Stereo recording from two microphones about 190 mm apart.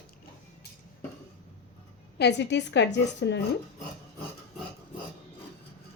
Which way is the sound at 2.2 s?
65° left (ahead or behind).